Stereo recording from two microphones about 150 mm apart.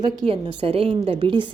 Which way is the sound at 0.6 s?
40° right (ahead or behind).